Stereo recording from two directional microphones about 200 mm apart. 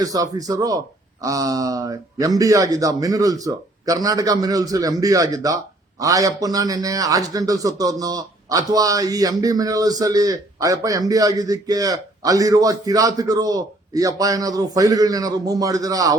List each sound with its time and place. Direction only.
0.0 s a man's voice: 20° right (ahead or behind)